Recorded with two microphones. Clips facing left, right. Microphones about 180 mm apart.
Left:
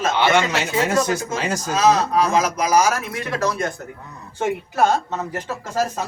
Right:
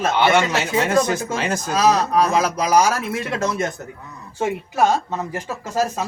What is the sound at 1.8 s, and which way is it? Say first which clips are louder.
Speech: even; 35° right (ahead or behind).